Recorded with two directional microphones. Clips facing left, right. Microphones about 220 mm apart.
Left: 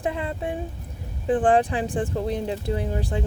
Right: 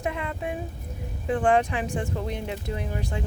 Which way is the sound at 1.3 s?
35° left (ahead or behind).